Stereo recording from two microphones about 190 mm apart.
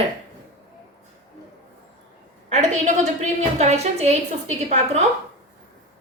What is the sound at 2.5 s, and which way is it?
A woman's voice, 35° right (ahead or behind).